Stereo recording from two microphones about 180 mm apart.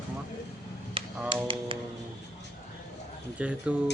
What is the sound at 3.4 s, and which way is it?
Speech, 5° right (ahead or behind).